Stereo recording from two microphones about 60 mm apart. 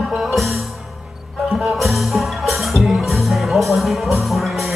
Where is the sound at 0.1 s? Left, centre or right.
Centre.